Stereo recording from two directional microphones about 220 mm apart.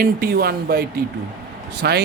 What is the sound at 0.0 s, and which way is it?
Speech, 45° right (ahead or behind).